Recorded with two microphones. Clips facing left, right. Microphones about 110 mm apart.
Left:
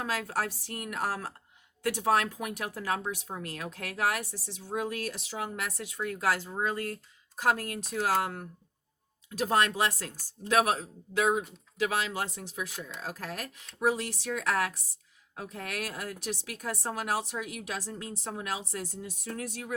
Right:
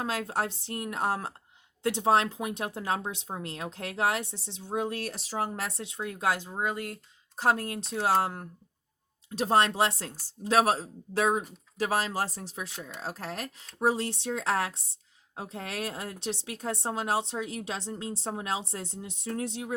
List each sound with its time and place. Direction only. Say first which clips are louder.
0.0 s speech: right 1 dB; 25° right (ahead or behind)
7.3 s speech: right 2 dB; 30° right (ahead or behind)
9.5 s speech: right 3 dB; 30° right (ahead or behind)